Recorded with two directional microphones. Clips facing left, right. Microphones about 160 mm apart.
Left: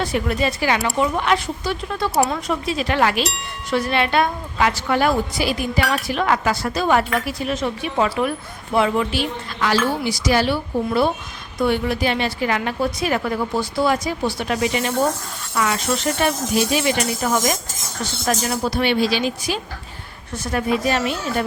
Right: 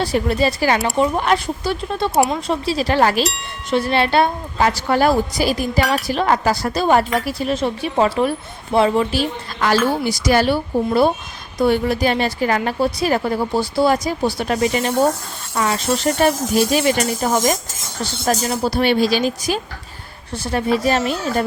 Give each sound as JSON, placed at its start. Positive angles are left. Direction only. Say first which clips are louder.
{"t": 0.0, "sound": "a woman's voice", "louder": "right 3 dB", "side_deg": -35}
{"t": 20.3, "sound": "a woman's voice", "louder": "right 2 dB", "side_deg": -30}